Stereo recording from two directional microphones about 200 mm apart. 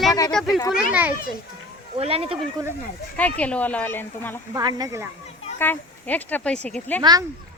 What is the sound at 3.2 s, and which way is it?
Speech, 5° left (ahead or behind).